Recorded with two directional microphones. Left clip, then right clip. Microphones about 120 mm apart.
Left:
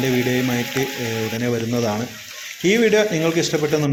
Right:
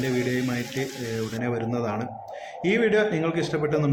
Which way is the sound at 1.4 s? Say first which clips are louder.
Left 5 dB; 25° left (ahead or behind).